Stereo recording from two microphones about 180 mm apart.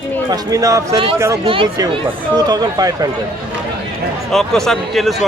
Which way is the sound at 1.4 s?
30° right (ahead or behind).